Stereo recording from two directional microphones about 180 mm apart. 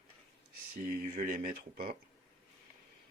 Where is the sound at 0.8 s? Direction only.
50° right (ahead or behind).